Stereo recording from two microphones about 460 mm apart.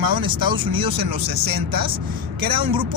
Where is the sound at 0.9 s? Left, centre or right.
Right.